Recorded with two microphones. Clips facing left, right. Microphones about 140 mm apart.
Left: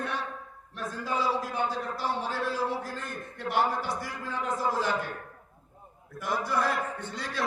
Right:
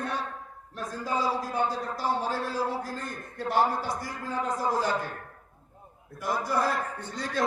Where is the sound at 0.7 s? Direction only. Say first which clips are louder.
Right 1 dB; 40° right (ahead or behind).